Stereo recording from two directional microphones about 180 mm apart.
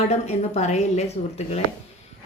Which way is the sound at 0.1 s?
40° left (ahead or behind).